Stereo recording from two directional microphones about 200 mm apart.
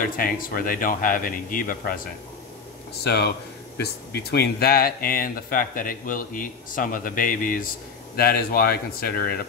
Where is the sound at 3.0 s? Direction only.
55° left (ahead or behind).